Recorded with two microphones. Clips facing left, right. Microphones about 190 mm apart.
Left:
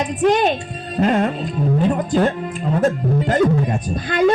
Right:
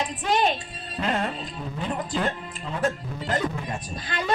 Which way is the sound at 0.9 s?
45° left (ahead or behind).